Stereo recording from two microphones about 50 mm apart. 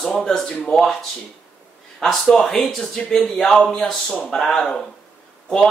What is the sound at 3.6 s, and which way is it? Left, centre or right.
Speech, centre.